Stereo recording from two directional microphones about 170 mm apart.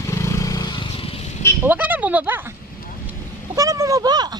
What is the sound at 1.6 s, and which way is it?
Speech, 10° right (ahead or behind).